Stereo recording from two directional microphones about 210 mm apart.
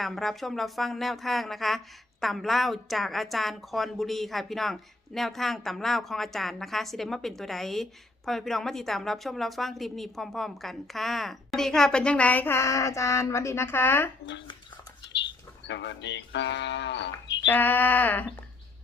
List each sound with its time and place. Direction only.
0.0 s a woman's voice: centre (ahead or behind)
15.6 s speech: 55° left (ahead or behind)
17.5 s a sound: 10° left (ahead or behind)